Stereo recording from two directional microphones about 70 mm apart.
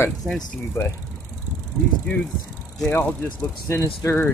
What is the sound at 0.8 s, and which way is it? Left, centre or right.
Speech, left.